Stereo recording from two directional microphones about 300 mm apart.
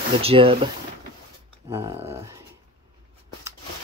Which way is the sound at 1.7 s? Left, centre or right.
Centre.